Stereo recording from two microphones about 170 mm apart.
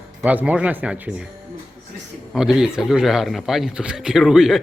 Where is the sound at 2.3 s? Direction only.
5° right (ahead or behind).